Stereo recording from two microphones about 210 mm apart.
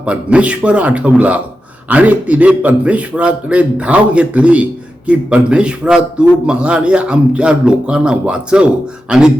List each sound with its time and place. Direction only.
0.0 s a man's voice: 5° right (ahead or behind)